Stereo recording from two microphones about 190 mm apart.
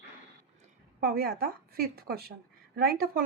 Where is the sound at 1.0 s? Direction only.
50° right (ahead or behind).